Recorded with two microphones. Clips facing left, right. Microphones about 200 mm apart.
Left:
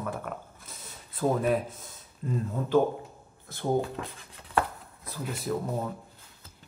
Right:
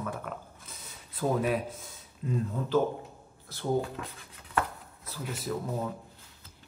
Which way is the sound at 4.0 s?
30° left (ahead or behind).